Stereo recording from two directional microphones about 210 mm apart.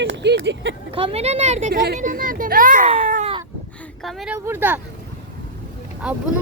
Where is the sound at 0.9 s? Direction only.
25° right (ahead or behind).